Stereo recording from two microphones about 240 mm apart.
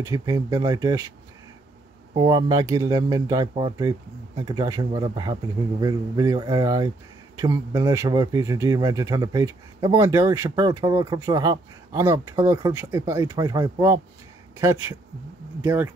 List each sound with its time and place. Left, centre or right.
0.0 s speech: centre
2.1 s speech: centre